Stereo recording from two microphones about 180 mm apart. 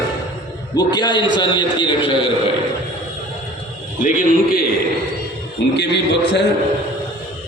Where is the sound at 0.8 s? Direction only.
25° left (ahead or behind).